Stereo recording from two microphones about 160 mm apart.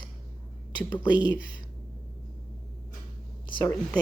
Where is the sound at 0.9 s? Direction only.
25° left (ahead or behind).